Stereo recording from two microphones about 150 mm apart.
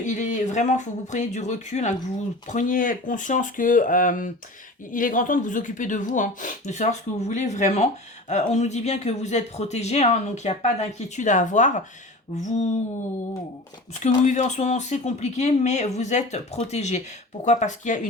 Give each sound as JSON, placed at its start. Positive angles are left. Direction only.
{"t": 0.0, "sound": "speech", "side_deg": 55}
{"t": 14.3, "sound": "speech", "side_deg": 50}